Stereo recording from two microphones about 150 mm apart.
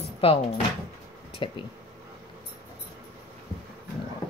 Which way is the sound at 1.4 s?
35° left (ahead or behind).